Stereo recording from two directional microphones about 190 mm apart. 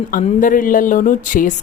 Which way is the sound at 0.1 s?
45° left (ahead or behind).